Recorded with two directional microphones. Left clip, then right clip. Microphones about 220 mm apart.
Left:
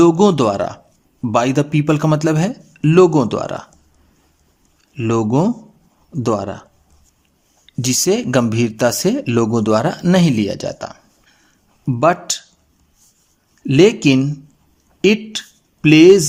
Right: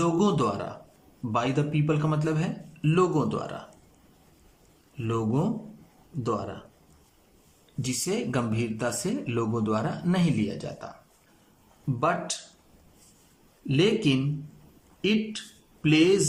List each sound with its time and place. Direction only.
0.0 s speech: 50° left (ahead or behind)
4.9 s speech: 50° left (ahead or behind)
7.8 s speech: 45° left (ahead or behind)
11.9 s speech: 50° left (ahead or behind)
13.7 s speech: 50° left (ahead or behind)